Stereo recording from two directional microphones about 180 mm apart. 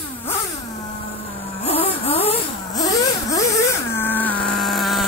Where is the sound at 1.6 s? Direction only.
35° left (ahead or behind).